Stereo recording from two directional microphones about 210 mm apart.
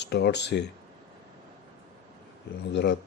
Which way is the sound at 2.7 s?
55° left (ahead or behind).